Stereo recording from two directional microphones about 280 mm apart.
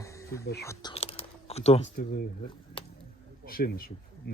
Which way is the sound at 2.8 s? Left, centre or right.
Centre.